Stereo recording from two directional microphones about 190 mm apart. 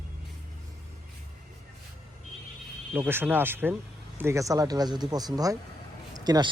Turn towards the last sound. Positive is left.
turn(degrees=-20)  # may be behind; listen again after turning